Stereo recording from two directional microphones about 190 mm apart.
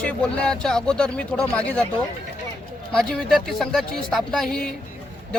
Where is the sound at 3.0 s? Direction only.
Centre (ahead or behind).